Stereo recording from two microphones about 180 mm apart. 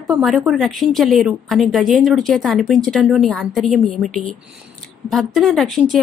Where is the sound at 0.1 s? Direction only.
Centre (ahead or behind).